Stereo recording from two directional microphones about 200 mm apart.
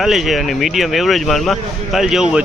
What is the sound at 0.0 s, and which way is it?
Speech, centre (ahead or behind).